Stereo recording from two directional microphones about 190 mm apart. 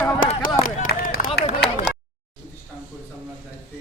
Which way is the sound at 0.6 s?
45° left (ahead or behind).